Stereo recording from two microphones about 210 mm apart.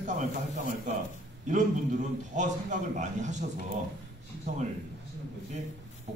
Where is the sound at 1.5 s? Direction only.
35° right (ahead or behind).